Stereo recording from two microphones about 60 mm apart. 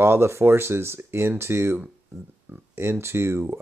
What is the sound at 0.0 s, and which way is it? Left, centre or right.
Speech, right.